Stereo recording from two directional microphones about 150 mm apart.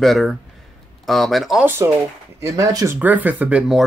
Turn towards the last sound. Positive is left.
turn(degrees=-5)  # may be behind; listen again after turning